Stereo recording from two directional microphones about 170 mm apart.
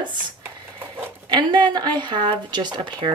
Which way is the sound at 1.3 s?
25° right (ahead or behind).